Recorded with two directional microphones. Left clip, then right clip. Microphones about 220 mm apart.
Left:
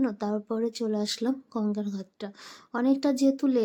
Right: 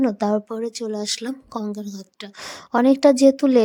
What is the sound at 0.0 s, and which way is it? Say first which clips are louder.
Speech: right 9 dB; 35° right (ahead or behind).